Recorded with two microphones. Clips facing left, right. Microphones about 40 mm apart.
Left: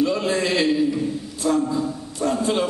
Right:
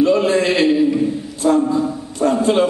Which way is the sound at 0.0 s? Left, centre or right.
Right.